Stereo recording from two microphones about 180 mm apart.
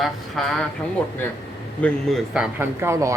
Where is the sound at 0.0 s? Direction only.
Centre (ahead or behind).